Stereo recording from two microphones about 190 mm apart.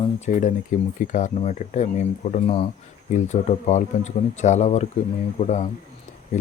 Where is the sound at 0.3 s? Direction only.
40° left (ahead or behind).